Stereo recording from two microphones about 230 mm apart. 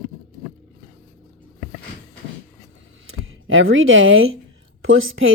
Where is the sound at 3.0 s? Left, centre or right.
Right.